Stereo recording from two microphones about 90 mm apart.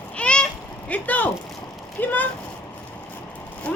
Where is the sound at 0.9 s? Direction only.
20° left (ahead or behind).